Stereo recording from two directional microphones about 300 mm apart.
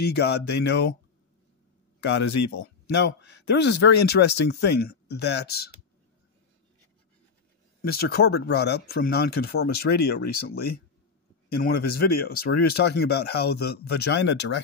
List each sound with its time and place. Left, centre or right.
0.0 s speech: left
2.0 s a sound: left
2.6 s speech: left
7.9 s speech: left